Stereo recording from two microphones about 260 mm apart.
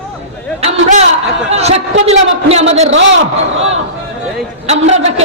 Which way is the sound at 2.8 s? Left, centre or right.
Right.